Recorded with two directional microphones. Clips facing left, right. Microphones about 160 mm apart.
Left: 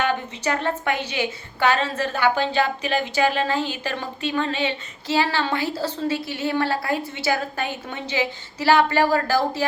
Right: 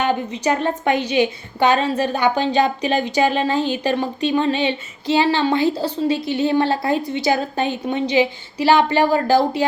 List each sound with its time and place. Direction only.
0.0 s a woman's voice: 15° right (ahead or behind)